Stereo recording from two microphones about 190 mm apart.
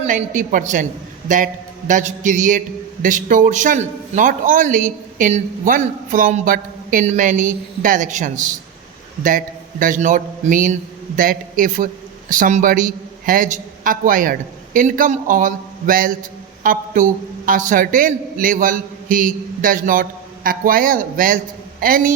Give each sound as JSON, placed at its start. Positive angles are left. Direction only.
{"t": 0.0, "sound": "a man's voice", "side_deg": -40}